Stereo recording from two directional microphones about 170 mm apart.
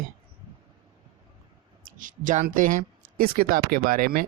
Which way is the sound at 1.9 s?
50° right (ahead or behind).